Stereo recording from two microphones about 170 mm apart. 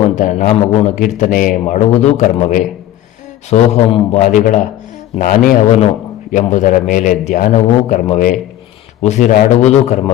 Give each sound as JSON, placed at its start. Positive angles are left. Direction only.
{"t": 0.0, "sound": "a man's voice", "side_deg": 45}
{"t": 1.6, "sound": "a man's voice", "side_deg": 40}